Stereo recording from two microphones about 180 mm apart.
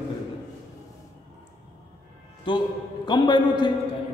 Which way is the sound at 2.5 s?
25° left (ahead or behind).